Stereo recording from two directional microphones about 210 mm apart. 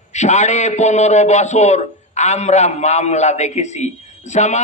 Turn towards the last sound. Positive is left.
turn(degrees=35)  # may be behind; listen again after turning